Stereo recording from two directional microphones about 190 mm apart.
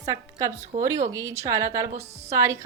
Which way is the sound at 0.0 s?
20° right (ahead or behind).